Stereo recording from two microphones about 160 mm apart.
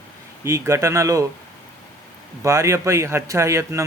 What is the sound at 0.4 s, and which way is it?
Speech, 15° right (ahead or behind).